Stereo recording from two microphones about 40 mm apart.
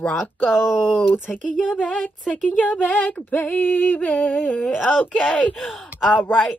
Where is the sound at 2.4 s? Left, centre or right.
Left.